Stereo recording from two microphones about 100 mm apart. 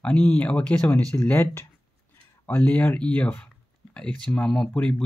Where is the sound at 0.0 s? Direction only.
15° left (ahead or behind).